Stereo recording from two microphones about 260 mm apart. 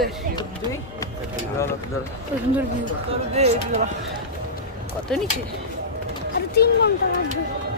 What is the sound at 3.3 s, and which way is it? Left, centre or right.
Speech, right.